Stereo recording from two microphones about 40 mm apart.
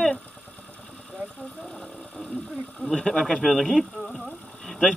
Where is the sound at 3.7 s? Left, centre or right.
Centre.